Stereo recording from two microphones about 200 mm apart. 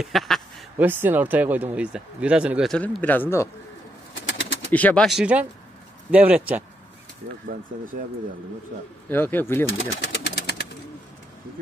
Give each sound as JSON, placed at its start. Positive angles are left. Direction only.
{"t": 0.0, "sound": "quack", "side_deg": 0}
{"t": 0.8, "sound": "speech", "side_deg": -10}
{"t": 4.1, "sound": "bird", "side_deg": 65}
{"t": 4.7, "sound": "speech", "side_deg": 5}
{"t": 9.1, "sound": "speech", "side_deg": 10}
{"t": 9.7, "sound": "speech", "side_deg": 65}